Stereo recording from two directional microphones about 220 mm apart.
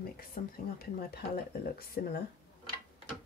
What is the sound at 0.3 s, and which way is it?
Speech, 45° left (ahead or behind).